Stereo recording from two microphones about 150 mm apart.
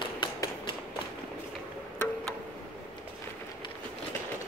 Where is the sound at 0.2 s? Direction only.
35° left (ahead or behind).